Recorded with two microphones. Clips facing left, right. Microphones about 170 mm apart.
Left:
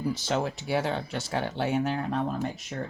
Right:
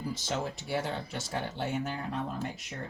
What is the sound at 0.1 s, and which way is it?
Speech, 65° left (ahead or behind).